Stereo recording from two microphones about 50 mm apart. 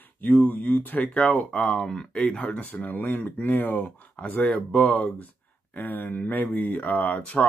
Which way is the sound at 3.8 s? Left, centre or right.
Left.